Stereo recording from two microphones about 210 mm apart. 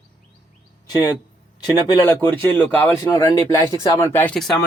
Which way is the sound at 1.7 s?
20° left (ahead or behind).